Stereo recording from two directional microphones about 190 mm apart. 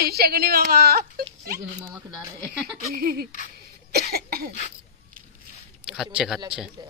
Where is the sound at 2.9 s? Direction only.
50° right (ahead or behind).